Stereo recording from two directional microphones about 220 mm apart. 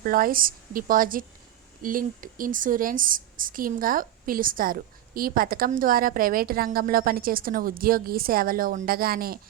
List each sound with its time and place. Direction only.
0.0 s speech: 40° right (ahead or behind)